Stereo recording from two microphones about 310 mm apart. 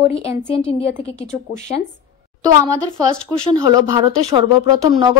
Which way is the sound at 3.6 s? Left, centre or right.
Centre.